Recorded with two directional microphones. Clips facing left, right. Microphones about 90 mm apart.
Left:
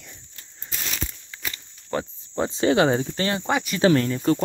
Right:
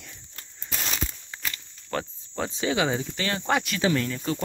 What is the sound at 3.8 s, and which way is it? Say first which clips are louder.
Speech: left 6 dB; 40° left (ahead or behind).